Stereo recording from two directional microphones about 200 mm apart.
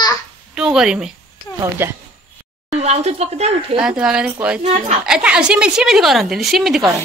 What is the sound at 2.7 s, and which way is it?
Speech, 35° right (ahead or behind).